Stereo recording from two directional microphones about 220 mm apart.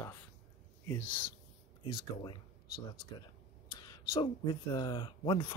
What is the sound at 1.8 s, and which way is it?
Speech, 25° left (ahead or behind).